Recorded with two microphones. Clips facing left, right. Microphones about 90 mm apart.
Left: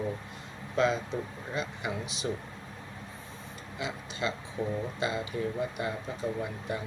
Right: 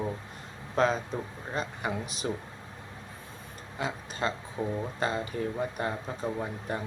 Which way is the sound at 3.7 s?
40° right (ahead or behind).